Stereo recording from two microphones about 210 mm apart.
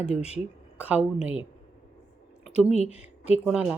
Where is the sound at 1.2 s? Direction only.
25° left (ahead or behind).